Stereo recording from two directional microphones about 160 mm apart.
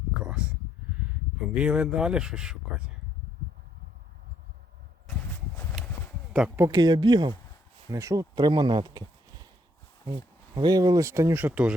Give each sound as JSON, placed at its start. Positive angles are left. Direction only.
{"t": 0.2, "sound": "a sound", "side_deg": -5}
{"t": 1.4, "sound": "speech", "side_deg": -5}
{"t": 5.8, "sound": "horse", "side_deg": -5}
{"t": 6.3, "sound": "speech", "side_deg": -5}
{"t": 6.7, "sound": "speech", "side_deg": -25}
{"t": 10.5, "sound": "speech", "side_deg": -25}